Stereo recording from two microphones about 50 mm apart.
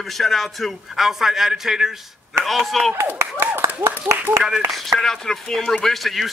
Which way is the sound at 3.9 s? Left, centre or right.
Right.